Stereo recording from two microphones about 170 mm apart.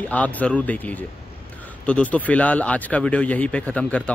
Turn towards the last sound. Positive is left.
turn(degrees=5)  # may be behind; listen again after turning